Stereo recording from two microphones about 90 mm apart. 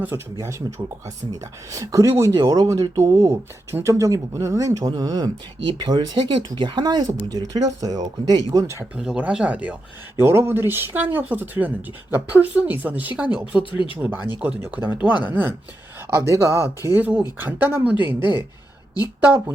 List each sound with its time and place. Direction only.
0.6 s speech: 50° right (ahead or behind)
1.0 s speech: 35° right (ahead or behind)
2.3 s speech: 50° right (ahead or behind)
8.5 s speech: 30° right (ahead or behind)
8.8 s speech: 10° right (ahead or behind)
10.2 s speech: 25° right (ahead or behind)
13.6 s speech: 75° left (ahead or behind)
14.6 s speech: 20° right (ahead or behind)
16.1 s speech: 35° right (ahead or behind)